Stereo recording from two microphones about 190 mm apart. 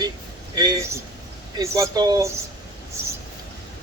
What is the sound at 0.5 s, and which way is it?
Speech, 20° right (ahead or behind).